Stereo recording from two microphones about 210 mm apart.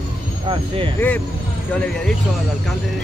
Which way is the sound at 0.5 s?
25° right (ahead or behind).